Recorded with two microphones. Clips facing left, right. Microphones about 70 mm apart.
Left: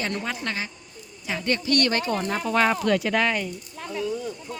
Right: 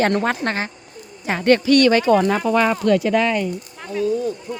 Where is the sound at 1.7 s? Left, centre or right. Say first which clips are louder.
Right 7 dB; right.